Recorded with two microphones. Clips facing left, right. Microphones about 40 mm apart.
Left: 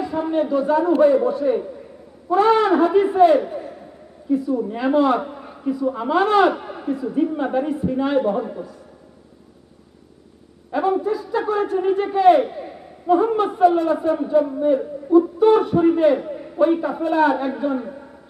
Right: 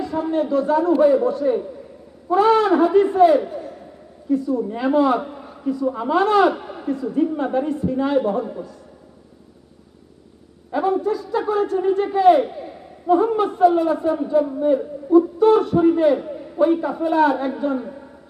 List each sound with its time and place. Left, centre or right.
0.0 s a man's voice: centre
2.3 s a sound: centre
2.9 s a man's voice: centre
4.8 s a sound: centre
5.2 s a man's voice: centre
10.7 s a man's voice: centre
11.6 s a man's voice: centre
13.1 s a sound: centre
13.9 s a man's voice: centre